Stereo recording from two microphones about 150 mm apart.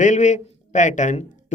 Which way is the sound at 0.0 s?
55° left (ahead or behind).